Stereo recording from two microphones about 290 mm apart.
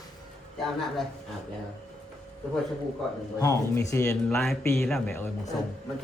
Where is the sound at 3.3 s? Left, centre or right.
Centre.